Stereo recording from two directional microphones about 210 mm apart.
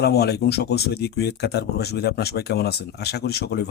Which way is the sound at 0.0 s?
50° left (ahead or behind).